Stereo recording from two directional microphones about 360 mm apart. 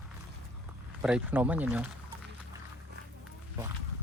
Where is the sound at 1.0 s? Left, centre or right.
Centre.